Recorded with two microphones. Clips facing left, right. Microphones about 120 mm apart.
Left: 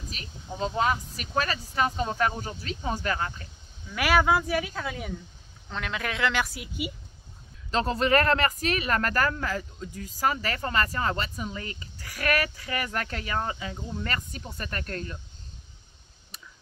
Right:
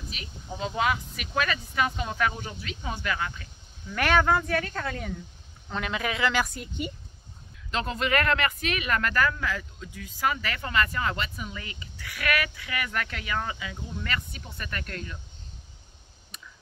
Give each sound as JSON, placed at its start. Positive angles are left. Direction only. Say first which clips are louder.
{"t": 0.6, "sound": "speech", "louder": "left 1 dB", "side_deg": 35}
{"t": 3.9, "sound": "a woman's voice", "louder": "even", "side_deg": 5}
{"t": 7.7, "sound": "speech", "louder": "left 4 dB", "side_deg": 35}